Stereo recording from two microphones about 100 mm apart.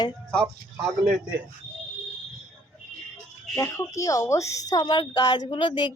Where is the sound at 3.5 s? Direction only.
30° left (ahead or behind); by 5.9 s 50° left (ahead or behind).